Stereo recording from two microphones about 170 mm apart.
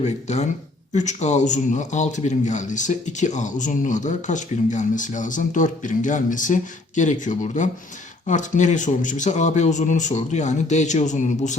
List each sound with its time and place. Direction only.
0.0 s a man's voice: 45° left (ahead or behind)